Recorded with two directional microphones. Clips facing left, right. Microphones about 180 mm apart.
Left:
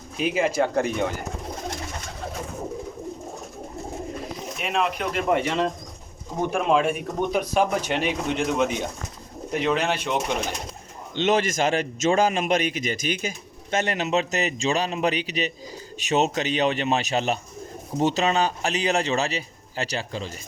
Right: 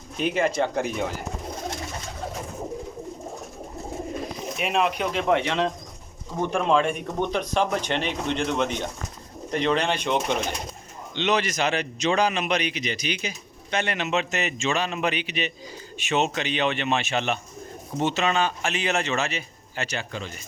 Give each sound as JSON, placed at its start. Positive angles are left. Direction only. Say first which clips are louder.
{"t": 0.2, "sound": "speech", "louder": "left 1 dB", "side_deg": 5}
{"t": 4.5, "sound": "speech", "louder": "right 1 dB", "side_deg": 0}
{"t": 11.1, "sound": "a man's voice", "louder": "left 3 dB", "side_deg": 45}